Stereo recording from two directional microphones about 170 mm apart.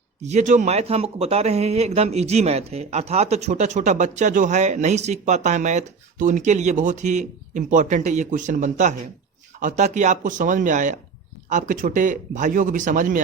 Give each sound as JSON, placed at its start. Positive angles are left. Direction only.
{"t": 0.2, "sound": "speech", "side_deg": -40}